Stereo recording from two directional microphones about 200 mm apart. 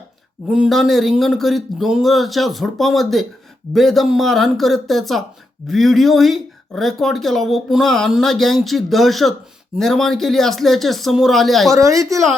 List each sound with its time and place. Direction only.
0.4 s speech: 5° right (ahead or behind)
11.7 s a woman's voice: 15° right (ahead or behind)